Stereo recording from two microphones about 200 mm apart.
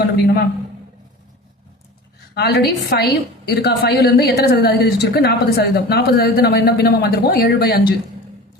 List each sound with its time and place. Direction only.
2.3 s a woman's voice: 55° left (ahead or behind)